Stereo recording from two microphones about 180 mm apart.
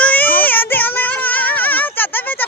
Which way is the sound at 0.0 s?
10° left (ahead or behind).